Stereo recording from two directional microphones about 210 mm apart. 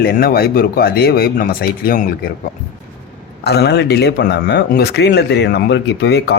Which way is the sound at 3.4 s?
50° left (ahead or behind).